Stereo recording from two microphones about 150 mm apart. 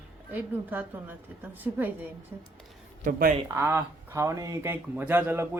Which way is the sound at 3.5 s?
15° right (ahead or behind).